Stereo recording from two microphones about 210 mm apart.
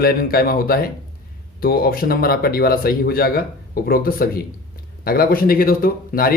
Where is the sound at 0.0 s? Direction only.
45° left (ahead or behind).